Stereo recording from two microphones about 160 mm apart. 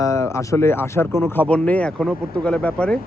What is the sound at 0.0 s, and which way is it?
Speech, 20° left (ahead or behind).